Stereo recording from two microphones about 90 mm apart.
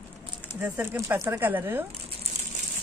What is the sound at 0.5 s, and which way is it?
Speech, 20° right (ahead or behind).